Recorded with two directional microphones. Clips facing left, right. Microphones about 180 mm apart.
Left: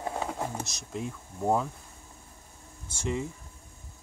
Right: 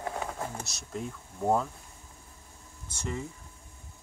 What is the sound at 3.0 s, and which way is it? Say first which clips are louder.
Speech: left 4 dB; 20° left (ahead or behind).